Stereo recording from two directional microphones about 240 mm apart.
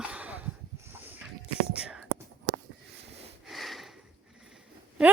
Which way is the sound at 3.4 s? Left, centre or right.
Centre.